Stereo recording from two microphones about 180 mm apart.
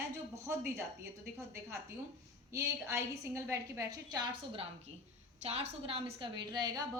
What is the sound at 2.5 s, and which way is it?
A woman's voice, 15° right (ahead or behind).